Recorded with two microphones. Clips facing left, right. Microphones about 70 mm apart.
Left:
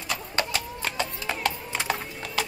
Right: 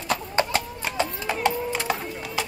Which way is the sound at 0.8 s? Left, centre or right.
Right.